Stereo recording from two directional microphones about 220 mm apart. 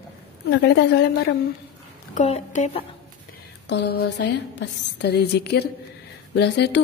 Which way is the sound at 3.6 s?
50° left (ahead or behind).